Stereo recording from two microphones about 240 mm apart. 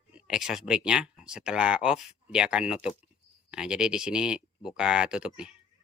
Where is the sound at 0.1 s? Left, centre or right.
Centre.